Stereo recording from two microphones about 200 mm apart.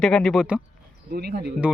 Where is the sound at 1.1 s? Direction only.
55° right (ahead or behind).